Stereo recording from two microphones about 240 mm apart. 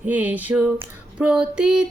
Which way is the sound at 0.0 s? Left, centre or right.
Centre.